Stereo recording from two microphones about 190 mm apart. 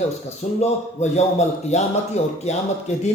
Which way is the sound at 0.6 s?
35° left (ahead or behind).